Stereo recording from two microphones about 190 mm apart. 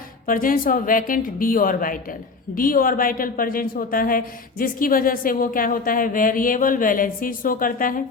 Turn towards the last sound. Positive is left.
turn(degrees=45)  # may be behind; listen again after turning